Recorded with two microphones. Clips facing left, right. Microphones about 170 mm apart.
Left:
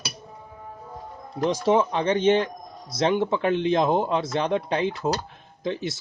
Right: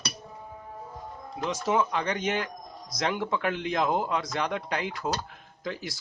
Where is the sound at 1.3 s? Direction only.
30° left (ahead or behind).